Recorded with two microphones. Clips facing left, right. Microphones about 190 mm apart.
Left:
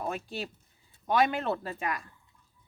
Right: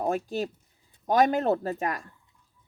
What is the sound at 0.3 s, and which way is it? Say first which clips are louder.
Speech: right 7 dB; 40° right (ahead or behind).